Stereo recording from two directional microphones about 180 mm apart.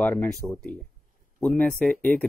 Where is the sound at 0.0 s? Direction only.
10° left (ahead or behind).